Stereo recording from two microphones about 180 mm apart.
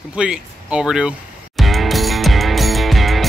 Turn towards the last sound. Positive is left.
turn(degrees=0)  # may be behind; listen again after turning